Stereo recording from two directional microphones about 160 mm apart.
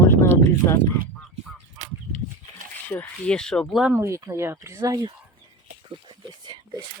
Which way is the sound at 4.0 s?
20° right (ahead or behind).